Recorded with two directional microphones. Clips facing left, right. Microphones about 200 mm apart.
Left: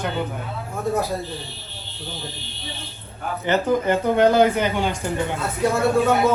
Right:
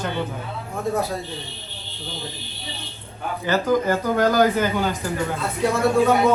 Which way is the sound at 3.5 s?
25° left (ahead or behind).